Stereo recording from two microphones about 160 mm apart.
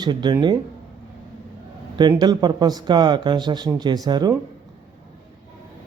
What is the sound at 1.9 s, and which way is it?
A man's voice, 25° right (ahead or behind).